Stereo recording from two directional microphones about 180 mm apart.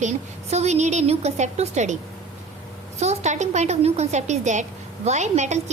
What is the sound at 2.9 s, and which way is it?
A woman's voice, 40° right (ahead or behind).